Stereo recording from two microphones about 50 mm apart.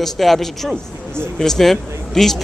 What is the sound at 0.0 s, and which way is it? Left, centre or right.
A man's voice, centre.